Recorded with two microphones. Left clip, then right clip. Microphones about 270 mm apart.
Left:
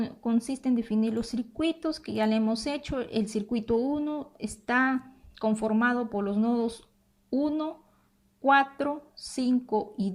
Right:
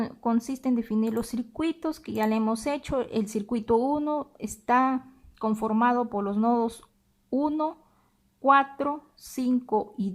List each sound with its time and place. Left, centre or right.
0.0 s speech: right